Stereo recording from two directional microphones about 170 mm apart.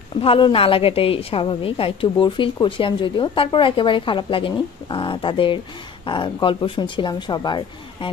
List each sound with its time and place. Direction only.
0.2 s a woman's voice: 35° left (ahead or behind)